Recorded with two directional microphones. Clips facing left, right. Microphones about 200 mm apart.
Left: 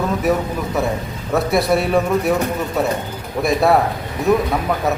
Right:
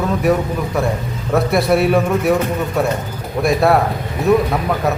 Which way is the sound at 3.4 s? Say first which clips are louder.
Right 1 dB; centre (ahead or behind).